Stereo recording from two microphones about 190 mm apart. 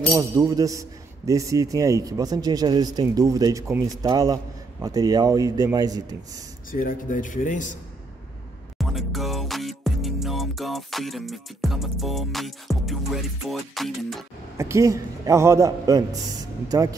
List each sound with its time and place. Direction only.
0.1 s a man's voice: 15° right (ahead or behind)
6.7 s speech: 45° left (ahead or behind)
8.7 s music: centre (ahead or behind)
14.6 s a man's voice: 15° right (ahead or behind)